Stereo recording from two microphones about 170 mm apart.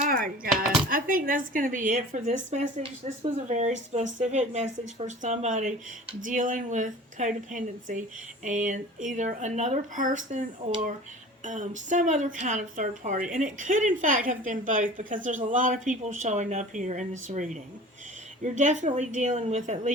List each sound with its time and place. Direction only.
0.0 s speech: 55° right (ahead or behind)
11.4 s speech: 50° right (ahead or behind)